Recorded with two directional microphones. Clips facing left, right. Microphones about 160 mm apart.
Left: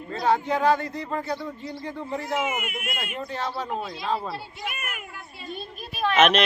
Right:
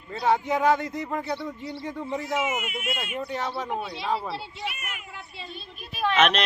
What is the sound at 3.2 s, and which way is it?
Speech, 15° right (ahead or behind).